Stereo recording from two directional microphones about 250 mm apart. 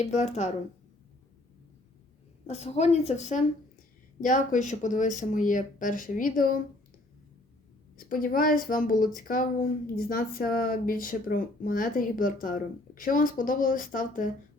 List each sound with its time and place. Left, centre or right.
0.0 s a woman's voice: left
2.5 s a woman's voice: left
7.9 s a woman's voice: left